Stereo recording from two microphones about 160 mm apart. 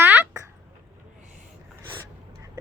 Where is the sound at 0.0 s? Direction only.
15° right (ahead or behind).